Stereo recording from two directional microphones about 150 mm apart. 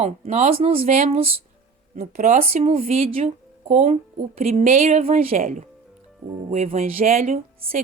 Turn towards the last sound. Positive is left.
turn(degrees=-40)  # may be behind; listen again after turning